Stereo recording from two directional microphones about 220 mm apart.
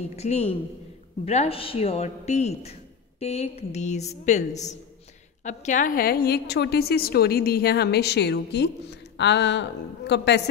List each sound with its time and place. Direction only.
0.1 s a woman's voice: 30° left (ahead or behind); by 10.5 s 50° left (ahead or behind)